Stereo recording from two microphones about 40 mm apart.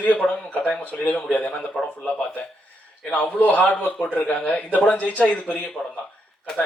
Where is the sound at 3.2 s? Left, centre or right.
Left.